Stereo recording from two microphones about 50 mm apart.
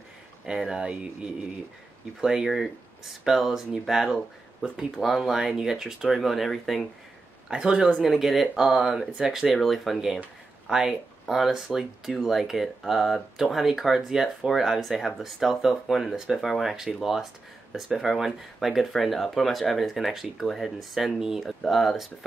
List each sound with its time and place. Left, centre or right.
0.5 s speech: centre
2.2 s speech: centre
7.4 s speech: centre
8.0 s speech: centre
8.5 s speech: centre
9.4 s speech: centre
14.8 s speech: centre